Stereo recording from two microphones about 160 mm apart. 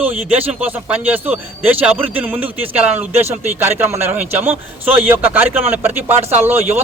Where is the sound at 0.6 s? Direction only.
10° right (ahead or behind).